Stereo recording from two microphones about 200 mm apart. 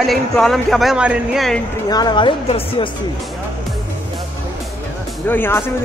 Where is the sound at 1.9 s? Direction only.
20° left (ahead or behind).